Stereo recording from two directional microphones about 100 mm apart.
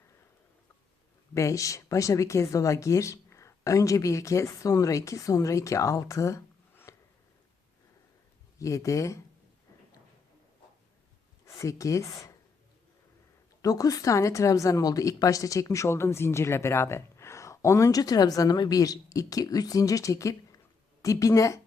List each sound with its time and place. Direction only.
1.3 s a woman's voice: 30° left (ahead or behind)
8.5 s a woman's voice: 30° left (ahead or behind)
11.4 s speech: 30° left (ahead or behind)
13.6 s a woman's voice: 35° left (ahead or behind)